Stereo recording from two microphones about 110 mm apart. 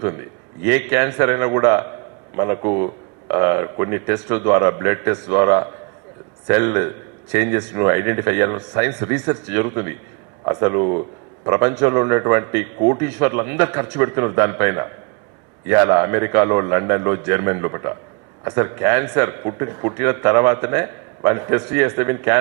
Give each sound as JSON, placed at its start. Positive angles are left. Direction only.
{"t": 0.0, "sound": "a man's voice", "side_deg": -25}